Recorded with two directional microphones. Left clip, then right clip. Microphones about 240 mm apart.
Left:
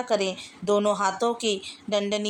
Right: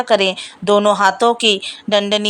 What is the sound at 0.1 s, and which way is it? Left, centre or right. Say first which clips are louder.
Speech: right 11 dB; right.